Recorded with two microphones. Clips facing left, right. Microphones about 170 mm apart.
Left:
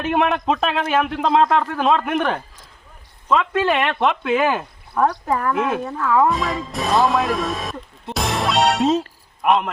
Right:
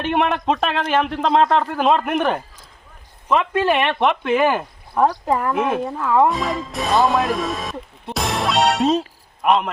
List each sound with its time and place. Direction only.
0.0 s speech: centre (ahead or behind)
3.7 s speech: centre (ahead or behind)
4.9 s speech: 15° right (ahead or behind)
5.5 s speech: centre (ahead or behind)
5.8 s speech: 15° right (ahead or behind)
6.2 s speech: centre (ahead or behind)